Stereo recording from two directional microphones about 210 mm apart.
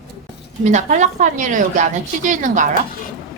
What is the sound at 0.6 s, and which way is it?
A woman's voice, 35° right (ahead or behind).